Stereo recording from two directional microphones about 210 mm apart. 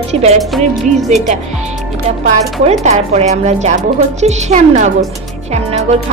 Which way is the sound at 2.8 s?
30° right (ahead or behind).